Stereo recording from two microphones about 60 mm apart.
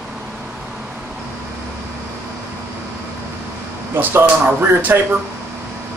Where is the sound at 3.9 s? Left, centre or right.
Right.